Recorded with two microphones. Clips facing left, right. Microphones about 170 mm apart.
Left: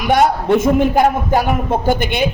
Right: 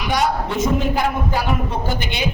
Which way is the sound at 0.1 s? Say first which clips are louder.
Left 8 dB; 55° left (ahead or behind).